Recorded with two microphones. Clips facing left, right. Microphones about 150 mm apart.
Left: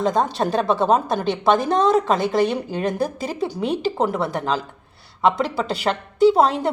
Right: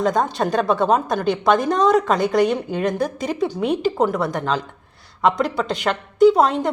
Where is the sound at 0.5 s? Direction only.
Centre (ahead or behind).